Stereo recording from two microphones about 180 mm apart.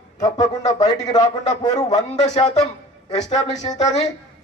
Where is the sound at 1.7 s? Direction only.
40° left (ahead or behind).